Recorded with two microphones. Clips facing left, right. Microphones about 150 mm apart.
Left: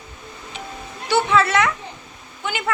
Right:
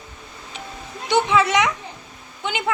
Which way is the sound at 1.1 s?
15° right (ahead or behind).